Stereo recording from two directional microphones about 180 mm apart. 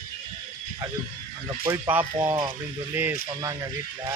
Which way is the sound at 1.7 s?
10° right (ahead or behind).